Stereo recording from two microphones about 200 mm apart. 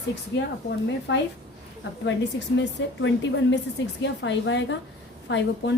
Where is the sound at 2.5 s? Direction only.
70° left (ahead or behind).